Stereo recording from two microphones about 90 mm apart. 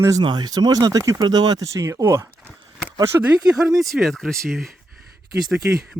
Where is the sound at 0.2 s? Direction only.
50° right (ahead or behind); by 3.3 s 30° right (ahead or behind).